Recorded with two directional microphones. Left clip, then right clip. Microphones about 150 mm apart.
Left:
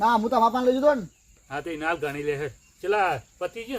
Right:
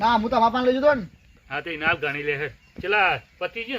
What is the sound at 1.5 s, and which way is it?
Speech, 20° left (ahead or behind).